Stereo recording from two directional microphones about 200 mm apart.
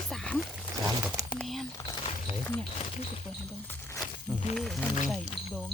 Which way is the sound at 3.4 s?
5° left (ahead or behind).